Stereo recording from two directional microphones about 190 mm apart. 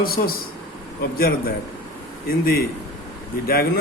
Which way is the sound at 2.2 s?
50° left (ahead or behind).